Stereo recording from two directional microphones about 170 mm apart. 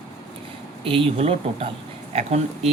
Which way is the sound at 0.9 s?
35° right (ahead or behind).